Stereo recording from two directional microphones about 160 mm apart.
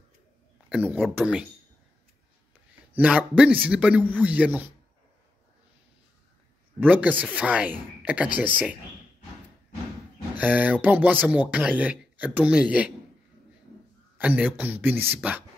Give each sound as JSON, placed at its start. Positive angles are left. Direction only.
{"t": 0.7, "sound": "speech", "side_deg": -10}
{"t": 2.9, "sound": "speech", "side_deg": -10}
{"t": 6.8, "sound": "speech", "side_deg": -10}
{"t": 10.3, "sound": "speech", "side_deg": -10}
{"t": 14.1, "sound": "speech", "side_deg": -10}